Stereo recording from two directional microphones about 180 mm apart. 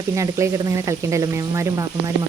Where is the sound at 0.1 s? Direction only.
15° right (ahead or behind).